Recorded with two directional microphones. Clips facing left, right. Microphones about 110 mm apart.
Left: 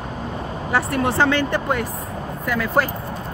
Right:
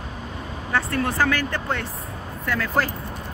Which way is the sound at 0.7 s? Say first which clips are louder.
Left 3 dB; 25° left (ahead or behind).